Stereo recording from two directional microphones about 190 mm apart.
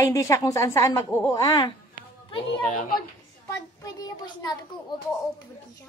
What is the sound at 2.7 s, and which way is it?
Speech, 45° left (ahead or behind).